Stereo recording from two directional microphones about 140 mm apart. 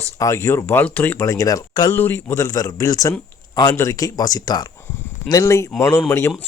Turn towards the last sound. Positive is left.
turn(degrees=20)  # may be behind; listen again after turning